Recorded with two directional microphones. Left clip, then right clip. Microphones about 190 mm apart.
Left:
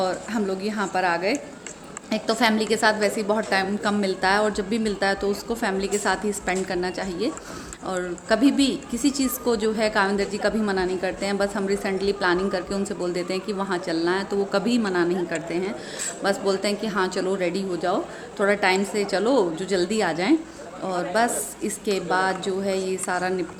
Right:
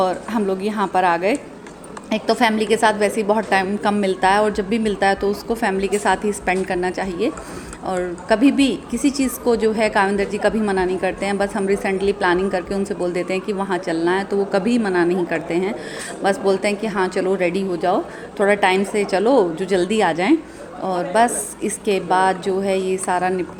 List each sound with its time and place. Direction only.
0.0 s a woman's voice: 20° right (ahead or behind)